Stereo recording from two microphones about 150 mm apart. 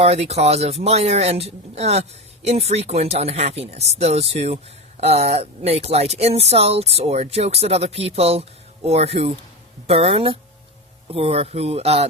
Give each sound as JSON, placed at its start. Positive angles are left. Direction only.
{"t": 0.0, "sound": "speech", "side_deg": -45}